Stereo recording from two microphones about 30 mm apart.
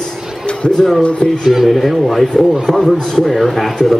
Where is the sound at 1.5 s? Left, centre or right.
Centre.